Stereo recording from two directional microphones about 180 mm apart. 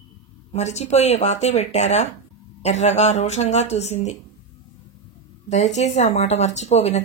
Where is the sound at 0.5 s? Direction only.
40° left (ahead or behind).